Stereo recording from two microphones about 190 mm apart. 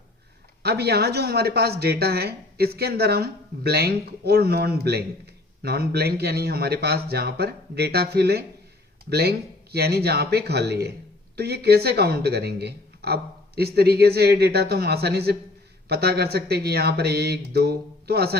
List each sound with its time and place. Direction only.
0.6 s speech: 60° right (ahead or behind)